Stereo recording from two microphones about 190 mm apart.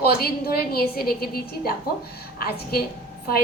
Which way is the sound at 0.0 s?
55° left (ahead or behind).